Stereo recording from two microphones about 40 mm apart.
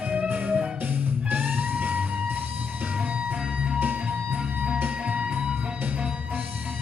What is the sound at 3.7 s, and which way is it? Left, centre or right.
Music, right.